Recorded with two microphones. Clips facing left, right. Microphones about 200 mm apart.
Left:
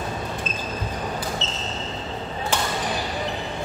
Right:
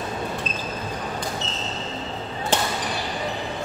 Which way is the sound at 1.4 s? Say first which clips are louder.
Even; 20° left (ahead or behind).